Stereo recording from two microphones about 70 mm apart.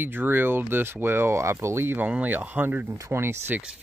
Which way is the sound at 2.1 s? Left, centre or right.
Right.